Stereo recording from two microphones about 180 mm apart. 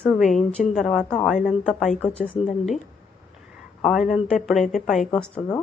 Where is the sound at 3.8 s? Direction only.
Centre (ahead or behind).